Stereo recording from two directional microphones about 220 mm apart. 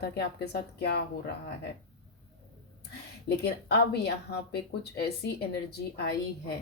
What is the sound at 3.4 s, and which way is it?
Speech, 50° left (ahead or behind).